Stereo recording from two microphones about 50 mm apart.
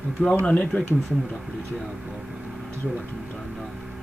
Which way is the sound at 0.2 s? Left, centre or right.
Left.